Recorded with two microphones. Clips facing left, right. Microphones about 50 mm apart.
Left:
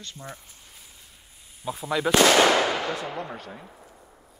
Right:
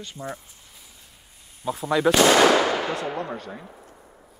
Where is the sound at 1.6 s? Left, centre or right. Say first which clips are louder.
Right 5 dB; right.